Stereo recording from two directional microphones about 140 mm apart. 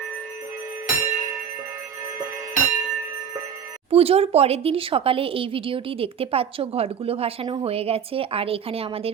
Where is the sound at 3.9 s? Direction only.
45° right (ahead or behind).